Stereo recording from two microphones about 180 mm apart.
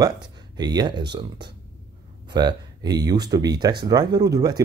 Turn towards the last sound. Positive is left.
turn(degrees=-20)  # may be behind; listen again after turning